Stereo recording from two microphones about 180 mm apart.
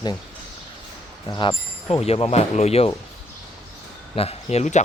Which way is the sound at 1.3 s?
30° left (ahead or behind).